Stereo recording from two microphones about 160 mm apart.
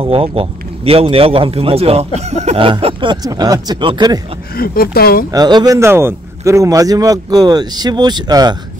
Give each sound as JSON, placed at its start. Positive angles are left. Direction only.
{"t": 0.0, "sound": "speech", "side_deg": -35}
{"t": 4.6, "sound": "speech", "side_deg": 70}
{"t": 5.3, "sound": "a man's voice", "side_deg": -25}